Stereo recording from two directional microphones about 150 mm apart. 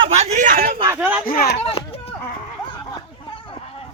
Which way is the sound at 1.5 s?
40° left (ahead or behind).